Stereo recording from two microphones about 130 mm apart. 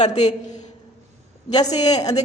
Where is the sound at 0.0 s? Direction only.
60° left (ahead or behind).